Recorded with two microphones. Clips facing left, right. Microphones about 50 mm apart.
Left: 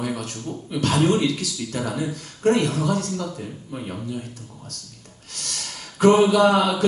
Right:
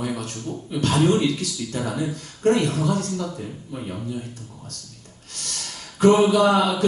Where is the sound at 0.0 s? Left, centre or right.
Left.